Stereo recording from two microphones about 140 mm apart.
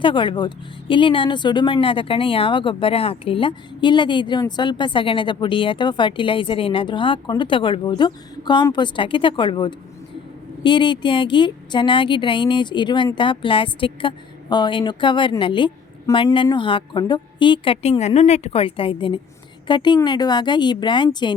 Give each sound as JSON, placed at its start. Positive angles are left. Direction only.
{"t": 0.0, "sound": "speech", "side_deg": 35}
{"t": 17.8, "sound": "a woman's voice", "side_deg": 50}